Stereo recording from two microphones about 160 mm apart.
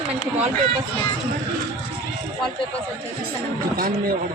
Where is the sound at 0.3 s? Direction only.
45° right (ahead or behind).